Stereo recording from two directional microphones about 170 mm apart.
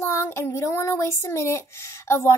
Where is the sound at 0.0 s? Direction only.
15° left (ahead or behind).